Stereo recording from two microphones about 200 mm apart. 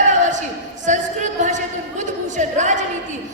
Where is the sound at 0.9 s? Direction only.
35° right (ahead or behind).